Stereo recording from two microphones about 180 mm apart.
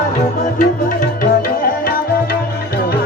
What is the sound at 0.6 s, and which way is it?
Music, 50° left (ahead or behind).